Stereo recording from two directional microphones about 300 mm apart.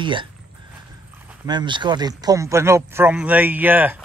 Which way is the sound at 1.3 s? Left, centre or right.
Centre.